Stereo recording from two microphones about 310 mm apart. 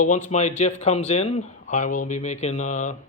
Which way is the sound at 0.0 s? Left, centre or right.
Left.